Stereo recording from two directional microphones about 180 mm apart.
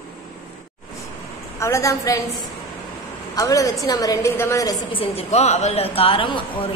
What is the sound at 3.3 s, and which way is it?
A woman's voice, 20° left (ahead or behind).